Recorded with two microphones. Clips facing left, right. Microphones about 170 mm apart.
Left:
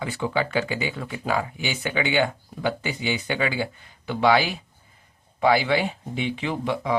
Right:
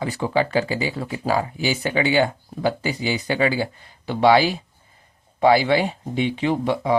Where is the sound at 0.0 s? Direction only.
35° right (ahead or behind).